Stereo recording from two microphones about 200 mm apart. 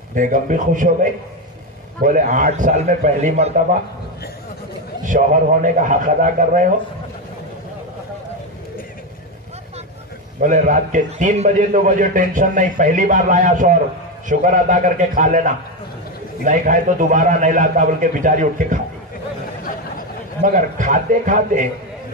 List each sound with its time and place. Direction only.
0.1 s a man's voice: 40° right (ahead or behind)
2.0 s a man's voice: 40° right (ahead or behind)
5.0 s a man's voice: 40° right (ahead or behind)
10.4 s a man's voice: 40° right (ahead or behind)
20.4 s a man's voice: 40° right (ahead or behind)